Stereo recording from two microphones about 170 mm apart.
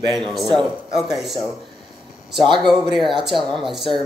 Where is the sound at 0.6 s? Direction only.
Centre (ahead or behind).